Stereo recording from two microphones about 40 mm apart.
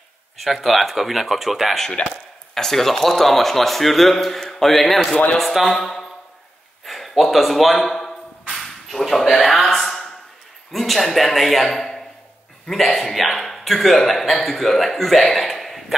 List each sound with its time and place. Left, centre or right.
0.4 s a man's voice: centre
2.0 s speech: left
2.5 s a man's voice: centre
6.8 s a sound: centre
10.7 s a man's voice: centre